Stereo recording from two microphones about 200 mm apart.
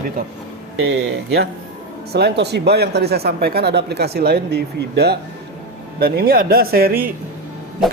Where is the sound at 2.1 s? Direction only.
55° right (ahead or behind).